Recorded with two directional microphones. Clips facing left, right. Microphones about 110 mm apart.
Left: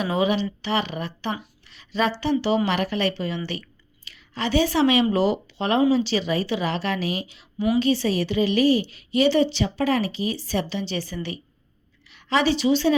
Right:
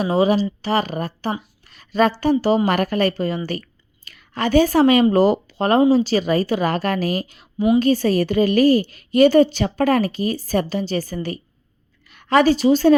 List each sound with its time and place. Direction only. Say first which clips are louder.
0.0 s a woman's voice: right 5 dB; 35° right (ahead or behind)